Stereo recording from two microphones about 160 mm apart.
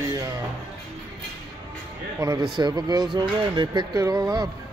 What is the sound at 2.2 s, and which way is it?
Speech, 20° right (ahead or behind).